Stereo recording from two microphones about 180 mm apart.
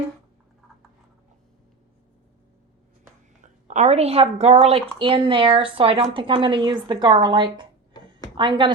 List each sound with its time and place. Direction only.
3.4 s a woman's voice: 40° right (ahead or behind); by 7.7 s 25° right (ahead or behind)
7.9 s a sound: 25° left (ahead or behind)
8.4 s a woman's voice: 25° right (ahead or behind)